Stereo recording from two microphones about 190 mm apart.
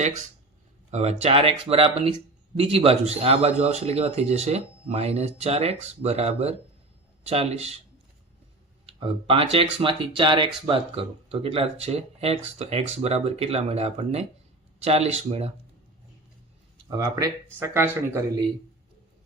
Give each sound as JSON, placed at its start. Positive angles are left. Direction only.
{"t": 0.9, "sound": "speech", "side_deg": -35}
{"t": 8.9, "sound": "speech", "side_deg": -30}
{"t": 16.9, "sound": "speech", "side_deg": -20}